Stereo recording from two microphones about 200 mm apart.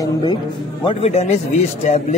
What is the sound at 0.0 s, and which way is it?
Speech, 20° left (ahead or behind).